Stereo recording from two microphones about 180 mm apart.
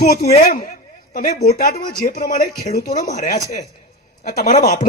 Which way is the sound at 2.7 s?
55° left (ahead or behind).